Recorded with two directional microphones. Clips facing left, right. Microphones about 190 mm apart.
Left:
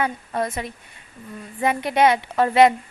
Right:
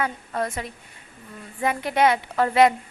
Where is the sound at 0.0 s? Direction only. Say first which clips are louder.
Left 2 dB; 20° left (ahead or behind).